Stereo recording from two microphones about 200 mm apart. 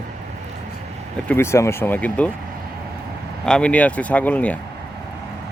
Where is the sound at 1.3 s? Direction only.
15° left (ahead or behind).